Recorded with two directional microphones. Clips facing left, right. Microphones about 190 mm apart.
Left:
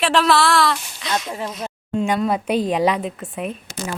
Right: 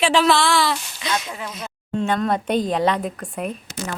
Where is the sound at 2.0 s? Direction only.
10° left (ahead or behind).